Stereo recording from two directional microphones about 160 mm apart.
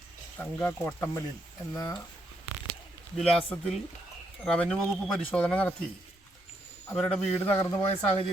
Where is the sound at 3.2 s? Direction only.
Centre (ahead or behind).